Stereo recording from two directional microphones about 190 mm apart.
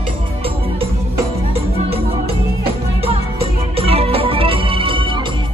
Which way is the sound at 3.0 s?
30° right (ahead or behind).